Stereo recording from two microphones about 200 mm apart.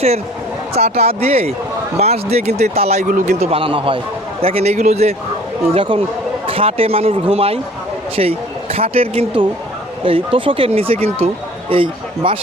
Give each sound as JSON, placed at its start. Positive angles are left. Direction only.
{"t": 0.7, "sound": "speech", "side_deg": -30}